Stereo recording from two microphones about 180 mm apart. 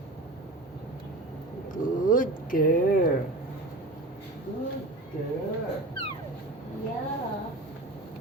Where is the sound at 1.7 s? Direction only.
50° left (ahead or behind).